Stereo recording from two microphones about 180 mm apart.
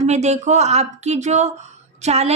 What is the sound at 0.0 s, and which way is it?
Speech, 40° right (ahead or behind).